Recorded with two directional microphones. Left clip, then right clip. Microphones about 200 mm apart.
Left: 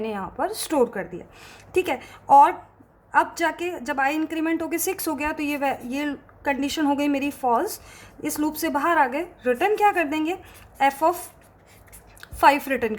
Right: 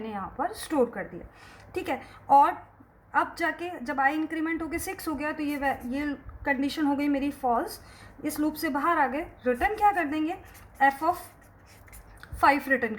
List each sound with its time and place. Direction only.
0.0 s a woman's voice: 40° left (ahead or behind)
12.2 s a woman's voice: 35° left (ahead or behind)